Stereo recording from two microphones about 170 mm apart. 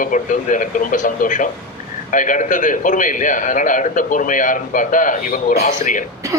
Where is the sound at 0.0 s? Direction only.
50° left (ahead or behind).